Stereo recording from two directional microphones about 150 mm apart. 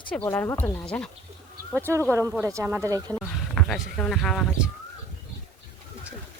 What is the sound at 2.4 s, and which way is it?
Speech, 15° right (ahead or behind).